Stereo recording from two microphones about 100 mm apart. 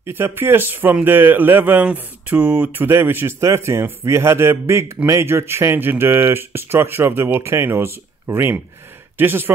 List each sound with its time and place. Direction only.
0.0 s speech: 20° right (ahead or behind)